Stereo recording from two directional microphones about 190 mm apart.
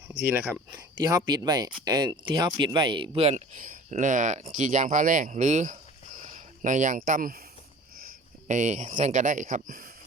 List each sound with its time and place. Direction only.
0.1 s speech: 10° right (ahead or behind)
0.7 s a sound: 20° right (ahead or behind)
1.3 s speech: 20° right (ahead or behind); by 7.3 s 45° right (ahead or behind)
8.4 s speech: 40° right (ahead or behind)